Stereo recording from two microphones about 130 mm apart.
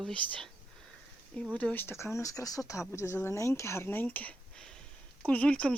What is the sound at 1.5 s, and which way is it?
Speech, 10° left (ahead or behind).